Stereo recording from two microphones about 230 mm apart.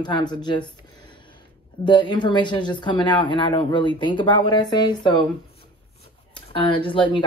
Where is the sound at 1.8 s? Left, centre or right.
Centre.